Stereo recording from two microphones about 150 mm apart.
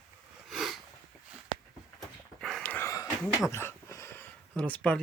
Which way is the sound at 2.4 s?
Centre (ahead or behind).